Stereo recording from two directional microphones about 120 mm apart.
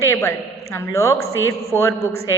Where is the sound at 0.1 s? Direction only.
25° left (ahead or behind).